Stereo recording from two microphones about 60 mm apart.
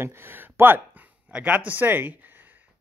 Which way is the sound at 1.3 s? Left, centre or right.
Right.